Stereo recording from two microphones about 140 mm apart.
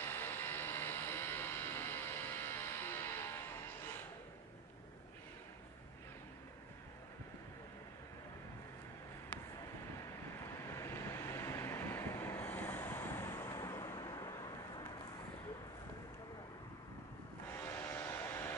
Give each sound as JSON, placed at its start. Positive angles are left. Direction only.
{"t": 0.0, "sound": "vehicle", "side_deg": 15}
{"t": 10.7, "sound": "vehicle", "side_deg": 20}
{"t": 17.5, "sound": "vehicle", "side_deg": 20}